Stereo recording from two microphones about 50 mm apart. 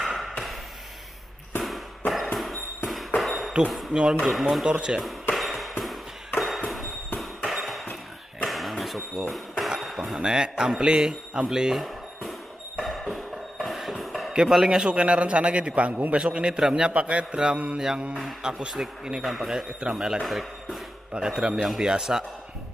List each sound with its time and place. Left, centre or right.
0.0 s a sound: centre
1.6 s a sound: centre
3.9 s speech: centre
4.3 s speech: centre
4.6 s speech: centre
5.3 s ping: centre
7.2 s music: centre
8.5 s a sound: centre
9.9 s speech: centre
12.8 s music: centre
14.5 s a man's voice: centre
17.7 s speech: centre
20.2 s speech: centre
21.1 s speech: centre